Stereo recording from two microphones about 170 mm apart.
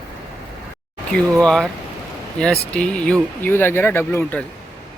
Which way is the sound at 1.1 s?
5° left (ahead or behind).